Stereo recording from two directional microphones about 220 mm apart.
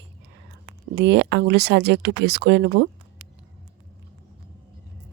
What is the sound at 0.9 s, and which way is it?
Speech, 50° right (ahead or behind).